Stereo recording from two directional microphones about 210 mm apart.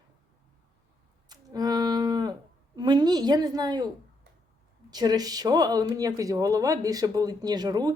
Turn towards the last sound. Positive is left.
turn(degrees=-20)  # may be behind; listen again after turning